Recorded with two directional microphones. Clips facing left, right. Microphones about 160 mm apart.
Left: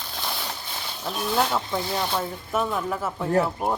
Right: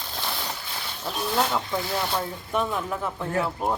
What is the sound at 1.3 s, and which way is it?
Speech, 5° left (ahead or behind).